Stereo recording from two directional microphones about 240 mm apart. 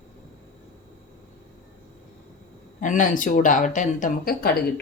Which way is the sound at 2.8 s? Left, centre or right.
Left.